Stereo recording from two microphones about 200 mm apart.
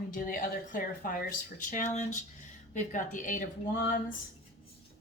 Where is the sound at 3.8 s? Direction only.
60° left (ahead or behind).